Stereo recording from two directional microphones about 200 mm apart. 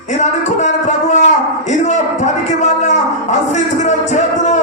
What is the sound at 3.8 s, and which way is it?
Music, 35° left (ahead or behind).